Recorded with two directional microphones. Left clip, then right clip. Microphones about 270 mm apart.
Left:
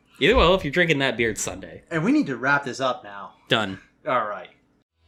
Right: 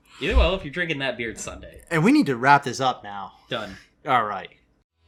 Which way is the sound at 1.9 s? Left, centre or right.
Right.